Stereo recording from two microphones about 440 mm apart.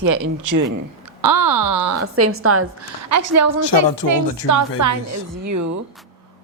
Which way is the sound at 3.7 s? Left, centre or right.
Left.